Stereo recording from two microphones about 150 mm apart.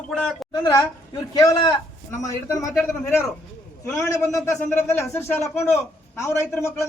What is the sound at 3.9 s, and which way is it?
A man's voice, 20° left (ahead or behind).